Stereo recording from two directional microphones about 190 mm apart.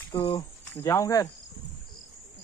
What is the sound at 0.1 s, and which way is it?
Speech, 20° left (ahead or behind).